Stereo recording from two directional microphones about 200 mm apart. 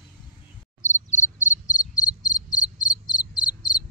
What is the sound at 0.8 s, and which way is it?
Insect, 35° left (ahead or behind).